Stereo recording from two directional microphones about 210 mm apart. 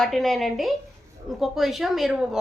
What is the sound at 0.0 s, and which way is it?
A woman's voice, centre (ahead or behind).